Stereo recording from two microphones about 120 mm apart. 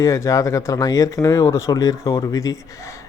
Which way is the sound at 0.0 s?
25° left (ahead or behind).